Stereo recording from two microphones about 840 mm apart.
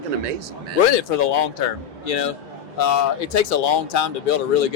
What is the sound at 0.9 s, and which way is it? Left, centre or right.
Speech, left.